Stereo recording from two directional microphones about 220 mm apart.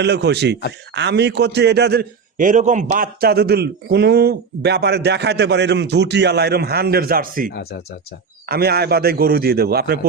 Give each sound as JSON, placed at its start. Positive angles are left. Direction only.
{"t": 0.0, "sound": "a man's voice", "side_deg": -50}
{"t": 7.5, "sound": "speech", "side_deg": 45}
{"t": 8.4, "sound": "a man's voice", "side_deg": -45}